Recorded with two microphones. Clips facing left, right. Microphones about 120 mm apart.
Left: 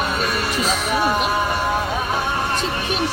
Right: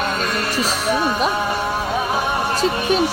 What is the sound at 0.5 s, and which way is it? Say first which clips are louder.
Speech: right 3 dB; centre (ahead or behind).